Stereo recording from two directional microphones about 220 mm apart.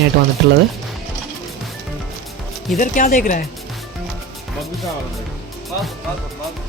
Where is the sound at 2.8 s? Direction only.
35° left (ahead or behind).